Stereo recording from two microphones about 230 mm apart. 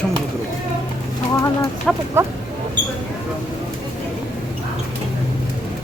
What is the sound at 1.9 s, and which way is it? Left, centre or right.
Speech, centre.